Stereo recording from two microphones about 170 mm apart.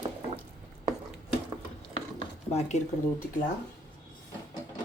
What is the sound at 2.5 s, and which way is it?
Speech, 40° left (ahead or behind).